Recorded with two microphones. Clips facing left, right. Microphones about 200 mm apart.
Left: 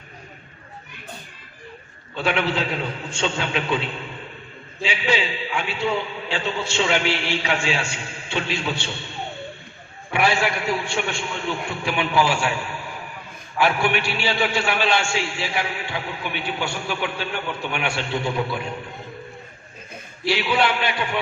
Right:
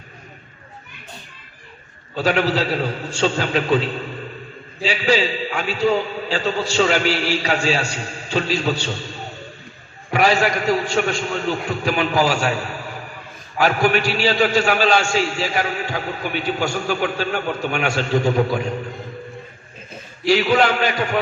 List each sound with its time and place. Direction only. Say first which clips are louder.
2.1 s a man's voice: right 4 dB; 40° right (ahead or behind)
20.2 s a man's voice: right 5 dB; 45° right (ahead or behind)